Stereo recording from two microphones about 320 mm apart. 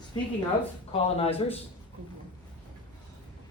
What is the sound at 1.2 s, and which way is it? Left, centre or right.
Speech, centre.